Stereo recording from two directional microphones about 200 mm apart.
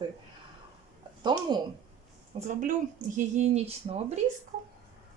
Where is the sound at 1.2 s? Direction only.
20° right (ahead or behind).